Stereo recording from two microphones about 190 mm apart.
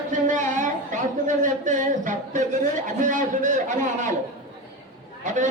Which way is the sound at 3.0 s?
40° right (ahead or behind).